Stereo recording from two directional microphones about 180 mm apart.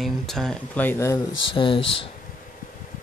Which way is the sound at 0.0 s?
Centre (ahead or behind).